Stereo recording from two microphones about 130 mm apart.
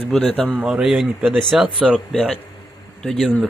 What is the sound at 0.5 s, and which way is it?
Speech, 5° right (ahead or behind).